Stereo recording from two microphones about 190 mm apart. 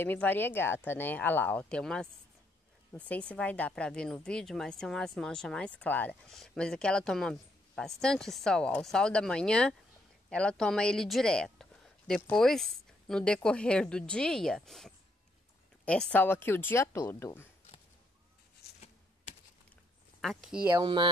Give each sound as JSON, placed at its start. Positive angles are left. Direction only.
{"t": 0.0, "sound": "speech", "side_deg": 10}
{"t": 18.6, "sound": "a sound", "side_deg": 60}
{"t": 20.2, "sound": "speech", "side_deg": 0}
{"t": 20.7, "sound": "speech", "side_deg": -25}